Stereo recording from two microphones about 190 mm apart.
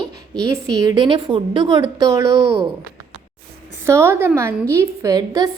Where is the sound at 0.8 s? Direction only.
25° right (ahead or behind).